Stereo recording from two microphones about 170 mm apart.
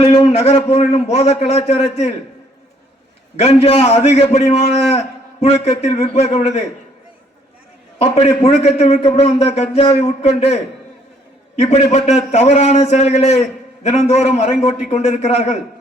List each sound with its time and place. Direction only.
0.0 s a man's voice: 35° left (ahead or behind)
3.3 s a man's voice: 40° left (ahead or behind)
7.9 s a man's voice: 40° left (ahead or behind)